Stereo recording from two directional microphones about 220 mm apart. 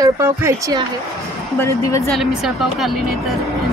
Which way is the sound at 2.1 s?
Centre (ahead or behind).